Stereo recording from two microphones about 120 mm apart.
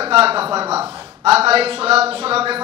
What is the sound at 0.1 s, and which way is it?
Speech, 55° right (ahead or behind).